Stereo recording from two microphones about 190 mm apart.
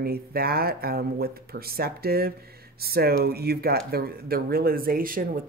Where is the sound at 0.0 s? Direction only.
55° right (ahead or behind).